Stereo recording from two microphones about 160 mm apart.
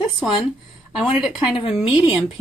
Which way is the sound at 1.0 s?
5° right (ahead or behind).